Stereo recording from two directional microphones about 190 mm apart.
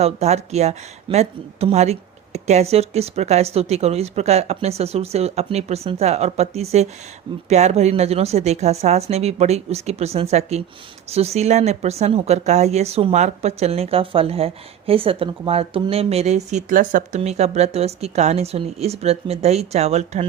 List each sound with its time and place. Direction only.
0.0 s speech: 35° right (ahead or behind)